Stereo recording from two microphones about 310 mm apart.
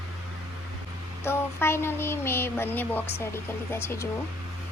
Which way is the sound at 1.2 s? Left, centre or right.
Centre.